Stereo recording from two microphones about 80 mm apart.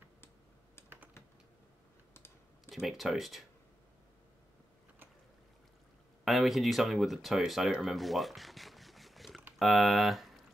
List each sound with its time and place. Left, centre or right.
0.8 s typing: left
2.1 s computer keyboard: left
2.7 s speech: centre
6.2 s speech: centre
7.8 s a sound: centre
9.6 s speech: centre